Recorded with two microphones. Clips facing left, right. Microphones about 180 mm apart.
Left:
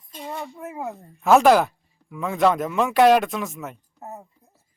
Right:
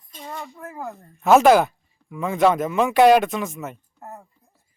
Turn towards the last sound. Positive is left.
turn(degrees=20)  # may be behind; listen again after turning